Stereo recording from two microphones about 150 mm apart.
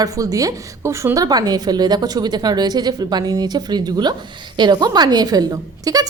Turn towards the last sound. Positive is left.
turn(degrees=-25)  # may be behind; listen again after turning